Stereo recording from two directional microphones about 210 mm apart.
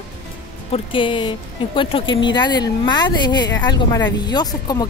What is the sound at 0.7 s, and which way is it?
Speech, 25° left (ahead or behind).